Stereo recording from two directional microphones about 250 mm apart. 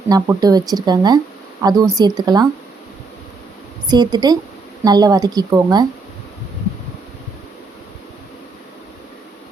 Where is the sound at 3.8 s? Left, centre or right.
Centre.